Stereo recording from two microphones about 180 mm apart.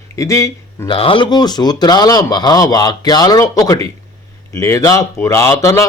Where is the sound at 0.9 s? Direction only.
30° left (ahead or behind).